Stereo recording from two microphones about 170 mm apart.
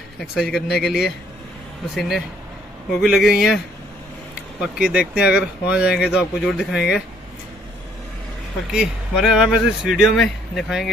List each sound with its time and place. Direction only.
0.2 s speech: centre (ahead or behind)
8.7 s speech: 5° right (ahead or behind)